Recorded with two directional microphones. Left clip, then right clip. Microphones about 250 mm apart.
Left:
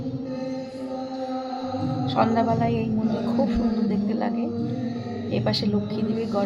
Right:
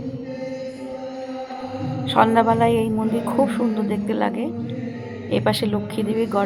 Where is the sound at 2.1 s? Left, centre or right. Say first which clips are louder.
Right 6 dB; right.